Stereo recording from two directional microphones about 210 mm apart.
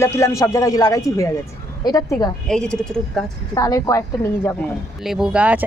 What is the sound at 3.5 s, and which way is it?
Speech, 15° left (ahead or behind).